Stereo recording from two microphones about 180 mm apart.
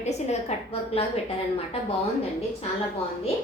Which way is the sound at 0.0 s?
40° left (ahead or behind).